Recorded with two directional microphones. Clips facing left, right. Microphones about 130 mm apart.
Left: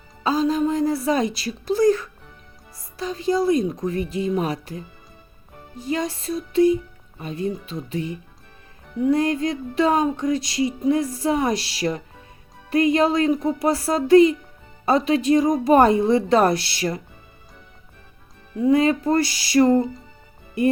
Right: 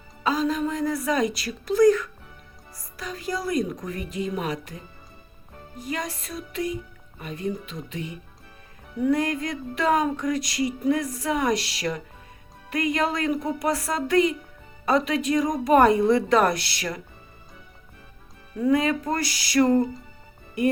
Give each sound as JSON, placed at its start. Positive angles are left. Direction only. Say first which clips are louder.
{"t": 0.2, "sound": "music", "louder": "left 4 dB", "side_deg": 30}
{"t": 5.8, "sound": "music", "louder": "left 6 dB", "side_deg": 30}
{"t": 7.6, "sound": "speech", "louder": "left 6 dB", "side_deg": 35}
{"t": 9.0, "sound": "music", "louder": "left 4 dB", "side_deg": 25}
{"t": 18.6, "sound": "music", "louder": "left 4 dB", "side_deg": 30}